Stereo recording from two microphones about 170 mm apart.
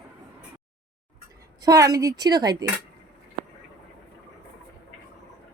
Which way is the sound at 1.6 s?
20° right (ahead or behind).